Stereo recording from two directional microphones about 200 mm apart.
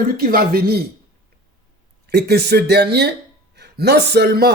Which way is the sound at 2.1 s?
55° right (ahead or behind).